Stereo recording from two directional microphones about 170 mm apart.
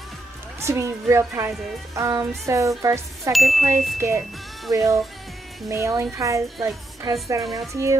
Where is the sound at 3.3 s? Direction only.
Centre (ahead or behind).